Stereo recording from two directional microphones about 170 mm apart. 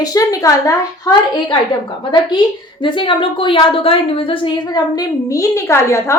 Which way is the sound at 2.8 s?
30° left (ahead or behind).